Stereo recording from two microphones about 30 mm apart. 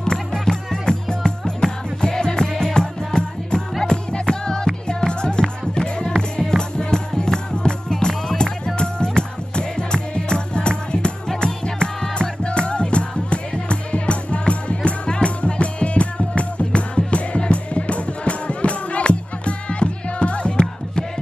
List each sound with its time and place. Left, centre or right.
0.0 s music: left